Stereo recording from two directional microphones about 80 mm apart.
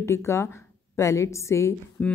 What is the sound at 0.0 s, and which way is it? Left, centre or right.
A woman's voice, left.